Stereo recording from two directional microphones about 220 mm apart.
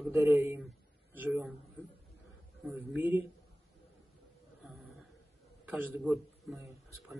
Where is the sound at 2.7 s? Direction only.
10° right (ahead or behind).